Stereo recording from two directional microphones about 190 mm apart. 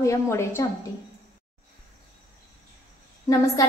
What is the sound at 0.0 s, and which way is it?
Speech, 15° left (ahead or behind).